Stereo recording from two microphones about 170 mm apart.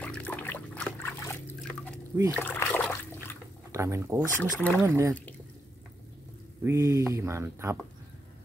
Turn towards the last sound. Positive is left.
turn(degrees=-15)  # may be behind; listen again after turning